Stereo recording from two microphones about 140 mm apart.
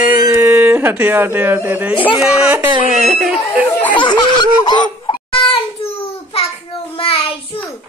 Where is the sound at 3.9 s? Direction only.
35° left (ahead or behind).